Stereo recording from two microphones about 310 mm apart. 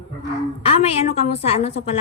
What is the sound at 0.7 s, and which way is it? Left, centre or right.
A woman's voice, centre.